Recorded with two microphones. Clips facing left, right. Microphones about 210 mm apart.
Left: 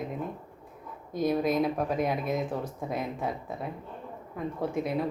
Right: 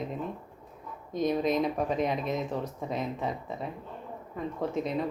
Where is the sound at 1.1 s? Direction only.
5° left (ahead or behind).